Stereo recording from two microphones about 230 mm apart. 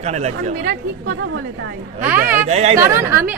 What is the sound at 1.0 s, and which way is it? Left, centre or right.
Speech, right.